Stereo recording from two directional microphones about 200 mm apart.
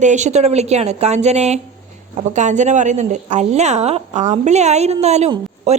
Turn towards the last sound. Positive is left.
turn(degrees=-35)  # may be behind; listen again after turning